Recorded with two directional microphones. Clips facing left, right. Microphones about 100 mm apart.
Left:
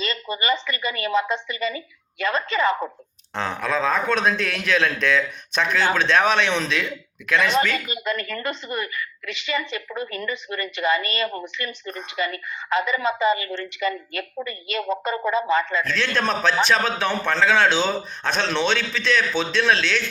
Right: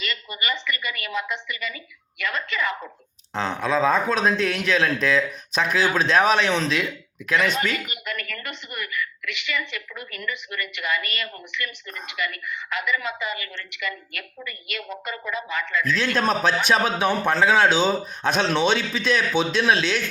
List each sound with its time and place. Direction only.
0.0 s a woman's voice: 30° left (ahead or behind)
3.3 s speech: centre (ahead or behind)
7.5 s a woman's voice: 30° left (ahead or behind)
16.0 s a man's voice: 5° right (ahead or behind)